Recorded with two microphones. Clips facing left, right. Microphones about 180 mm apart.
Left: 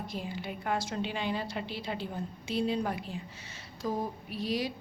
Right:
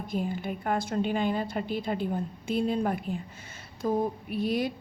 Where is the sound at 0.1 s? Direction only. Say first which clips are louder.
Right 7 dB; 50° right (ahead or behind).